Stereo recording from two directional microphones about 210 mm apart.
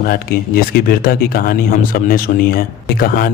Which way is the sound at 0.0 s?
45° left (ahead or behind).